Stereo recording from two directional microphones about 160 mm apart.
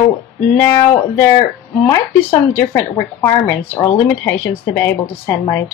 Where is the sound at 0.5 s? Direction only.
15° left (ahead or behind).